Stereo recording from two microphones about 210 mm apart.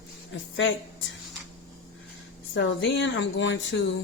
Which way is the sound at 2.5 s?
55° left (ahead or behind).